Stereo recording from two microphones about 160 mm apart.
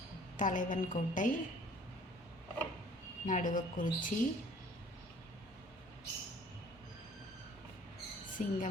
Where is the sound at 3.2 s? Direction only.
55° left (ahead or behind).